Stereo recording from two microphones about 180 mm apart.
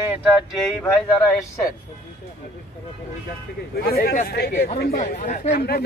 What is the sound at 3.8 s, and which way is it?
A man's voice, 60° left (ahead or behind).